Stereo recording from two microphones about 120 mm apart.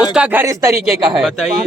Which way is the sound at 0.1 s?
10° right (ahead or behind).